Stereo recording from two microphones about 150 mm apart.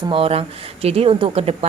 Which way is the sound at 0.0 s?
35° right (ahead or behind).